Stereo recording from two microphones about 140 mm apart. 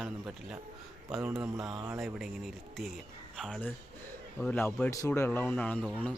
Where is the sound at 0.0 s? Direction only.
5° right (ahead or behind).